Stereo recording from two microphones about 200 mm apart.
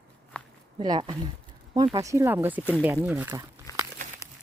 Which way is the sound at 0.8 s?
20° right (ahead or behind).